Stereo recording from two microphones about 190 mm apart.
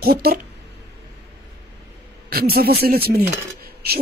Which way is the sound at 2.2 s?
55° right (ahead or behind).